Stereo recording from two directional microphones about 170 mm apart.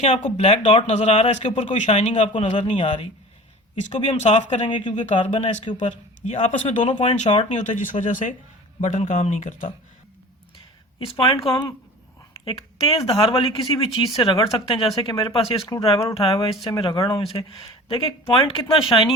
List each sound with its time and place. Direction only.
0.0 s speech: 40° left (ahead or behind)
4.7 s speech: 30° left (ahead or behind)
4.9 s speech: 45° left (ahead or behind)
11.0 s speech: 30° left (ahead or behind)